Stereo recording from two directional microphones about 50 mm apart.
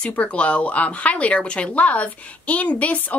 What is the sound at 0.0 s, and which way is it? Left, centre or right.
Speech, left.